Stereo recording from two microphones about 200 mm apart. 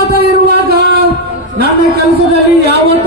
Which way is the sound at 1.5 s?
50° right (ahead or behind).